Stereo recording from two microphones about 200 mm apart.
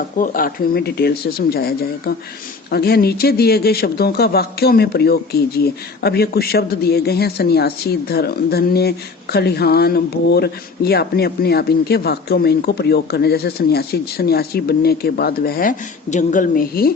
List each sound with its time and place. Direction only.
0.2 s speech: 45° left (ahead or behind)